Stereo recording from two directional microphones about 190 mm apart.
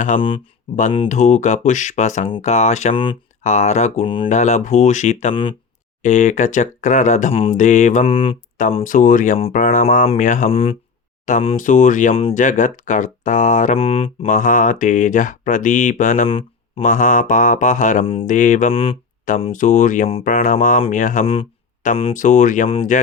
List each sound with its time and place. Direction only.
0.2 s speech: 30° left (ahead or behind)
1.0 s speech: 40° left (ahead or behind)
2.9 s speech: 25° left (ahead or behind)
3.4 s speech: 40° left (ahead or behind)
4.3 s speech: 40° left (ahead or behind)
6.0 s speech: 40° left (ahead or behind)
8.8 s speech: 45° left (ahead or behind)
10.5 s speech: 30° left (ahead or behind)
11.3 s speech: 40° left (ahead or behind)
14.3 s speech: 45° left (ahead or behind)
18.0 s speech: 30° left (ahead or behind)
18.3 s speech: 40° left (ahead or behind)
19.5 s speech: 40° left (ahead or behind)